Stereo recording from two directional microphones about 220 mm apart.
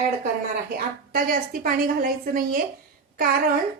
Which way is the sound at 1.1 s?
40° right (ahead or behind).